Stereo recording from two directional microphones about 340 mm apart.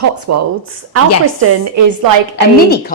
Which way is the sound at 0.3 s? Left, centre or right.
Right.